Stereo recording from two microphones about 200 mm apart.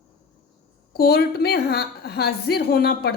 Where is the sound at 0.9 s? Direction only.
50° left (ahead or behind).